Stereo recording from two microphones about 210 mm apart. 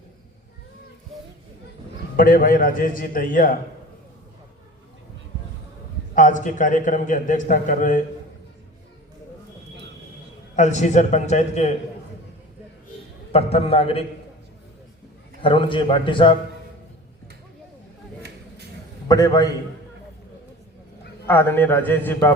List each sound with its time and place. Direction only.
2.1 s a man's voice: 40° left (ahead or behind)
6.1 s a man's voice: 40° left (ahead or behind)
10.5 s a man's voice: 35° left (ahead or behind)
13.3 s a man's voice: 30° left (ahead or behind)
15.4 s a man's voice: 25° left (ahead or behind)
19.0 s a man's voice: 15° left (ahead or behind)
21.2 s a man's voice: 10° left (ahead or behind)